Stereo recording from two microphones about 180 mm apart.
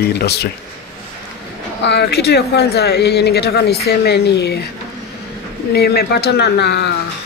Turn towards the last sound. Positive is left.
turn(degrees=65)  # may be behind; listen again after turning